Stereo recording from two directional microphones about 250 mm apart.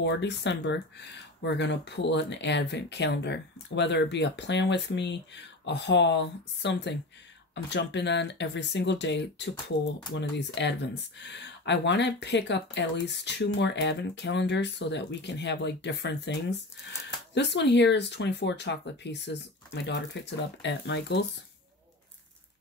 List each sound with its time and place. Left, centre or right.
0.0 s speech: left